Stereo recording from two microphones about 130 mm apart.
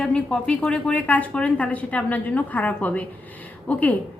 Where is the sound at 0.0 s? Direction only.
5° left (ahead or behind).